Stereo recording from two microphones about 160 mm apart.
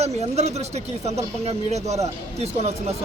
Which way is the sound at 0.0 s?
45° right (ahead or behind).